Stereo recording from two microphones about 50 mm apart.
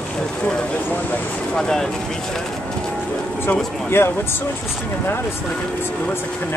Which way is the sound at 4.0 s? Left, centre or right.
Left.